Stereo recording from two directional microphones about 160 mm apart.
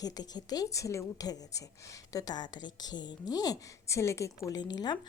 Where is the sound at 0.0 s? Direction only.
25° left (ahead or behind).